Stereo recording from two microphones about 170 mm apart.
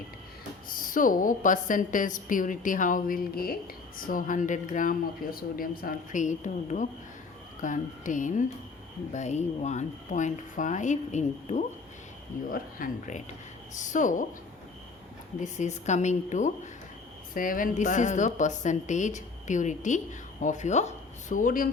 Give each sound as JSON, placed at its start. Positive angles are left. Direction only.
{"t": 0.7, "sound": "a woman's voice", "side_deg": 55}
{"t": 12.5, "sound": "a woman's voice", "side_deg": 55}
{"t": 15.4, "sound": "a woman's voice", "side_deg": 45}